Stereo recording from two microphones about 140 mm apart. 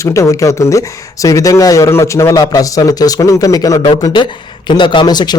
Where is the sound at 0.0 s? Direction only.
20° left (ahead or behind).